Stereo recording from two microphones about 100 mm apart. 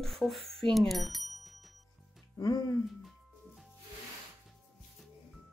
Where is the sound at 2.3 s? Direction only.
45° left (ahead or behind).